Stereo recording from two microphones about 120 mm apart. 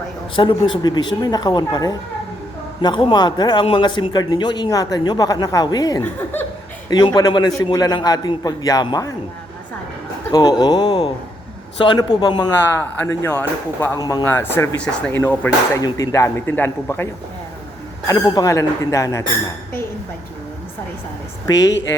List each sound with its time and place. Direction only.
0.3 s a man's voice: 45° left (ahead or behind)
6.0 s speech: 15° left (ahead or behind)
6.9 s a man's voice: 35° left (ahead or behind)
10.3 s a man's voice: 30° left (ahead or behind)
12.6 s speech: 20° left (ahead or behind)
14.0 s a man's voice: 30° left (ahead or behind)
14.3 s a man's voice: 20° left (ahead or behind)
14.8 s speech: 10° left (ahead or behind)
15.2 s a man's voice: 20° left (ahead or behind)
18.1 s a man's voice: 30° left (ahead or behind)
21.4 s a man's voice: 30° left (ahead or behind)